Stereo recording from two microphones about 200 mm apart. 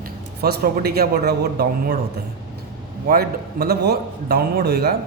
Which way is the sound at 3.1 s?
50° right (ahead or behind).